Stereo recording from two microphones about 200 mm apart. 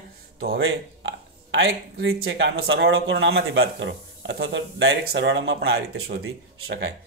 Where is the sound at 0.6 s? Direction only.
80° right.